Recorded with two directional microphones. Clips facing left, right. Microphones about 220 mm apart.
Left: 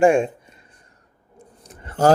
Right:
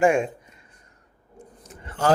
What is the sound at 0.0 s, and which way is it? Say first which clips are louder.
Speech: left 4 dB; 30° left (ahead or behind).